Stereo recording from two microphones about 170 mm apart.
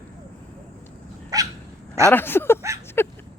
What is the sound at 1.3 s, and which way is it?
Dog, 20° right (ahead or behind).